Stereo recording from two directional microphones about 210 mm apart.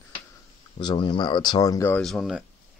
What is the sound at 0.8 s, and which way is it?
Speech, 20° left (ahead or behind).